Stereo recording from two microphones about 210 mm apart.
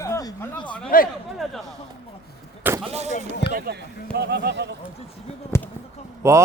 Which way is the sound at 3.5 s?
50° right (ahead or behind).